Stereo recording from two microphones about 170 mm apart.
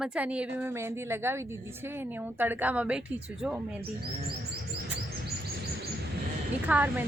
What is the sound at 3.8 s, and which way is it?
Speech, 65° right (ahead or behind).